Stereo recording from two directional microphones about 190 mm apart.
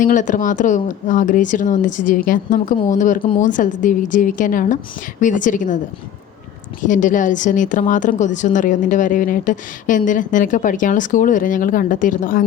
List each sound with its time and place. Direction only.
0.0 s a woman's voice: 40° left (ahead or behind)
6.8 s a woman's voice: 40° left (ahead or behind)